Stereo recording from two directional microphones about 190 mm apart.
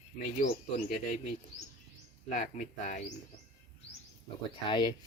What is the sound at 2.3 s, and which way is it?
Speech, 40° left (ahead or behind).